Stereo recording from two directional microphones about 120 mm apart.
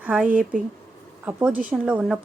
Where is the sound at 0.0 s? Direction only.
10° right (ahead or behind).